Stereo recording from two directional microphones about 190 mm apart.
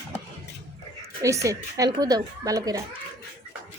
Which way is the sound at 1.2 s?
15° right (ahead or behind).